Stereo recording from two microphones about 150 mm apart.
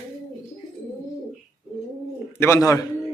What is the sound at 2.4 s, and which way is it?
Speech, 20° left (ahead or behind).